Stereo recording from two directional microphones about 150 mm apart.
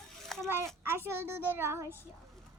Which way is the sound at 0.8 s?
15° right (ahead or behind).